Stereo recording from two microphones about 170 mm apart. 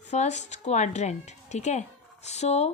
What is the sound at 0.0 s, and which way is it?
A woman's voice, 40° left (ahead or behind).